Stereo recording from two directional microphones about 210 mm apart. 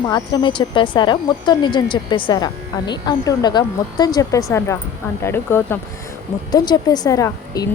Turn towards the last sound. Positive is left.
turn(degrees=15)  # may be behind; listen again after turning